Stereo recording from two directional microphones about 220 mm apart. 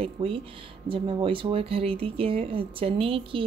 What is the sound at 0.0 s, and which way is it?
Speech, 25° right (ahead or behind).